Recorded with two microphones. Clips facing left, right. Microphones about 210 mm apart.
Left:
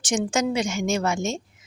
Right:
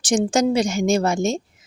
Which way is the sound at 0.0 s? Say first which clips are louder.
Right 5 dB; 35° right (ahead or behind).